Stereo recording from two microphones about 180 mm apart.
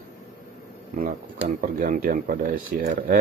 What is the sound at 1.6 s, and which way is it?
Speech, 55° right (ahead or behind).